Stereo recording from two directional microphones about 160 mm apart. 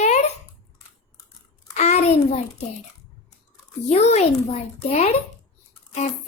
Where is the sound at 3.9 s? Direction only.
45° left (ahead or behind).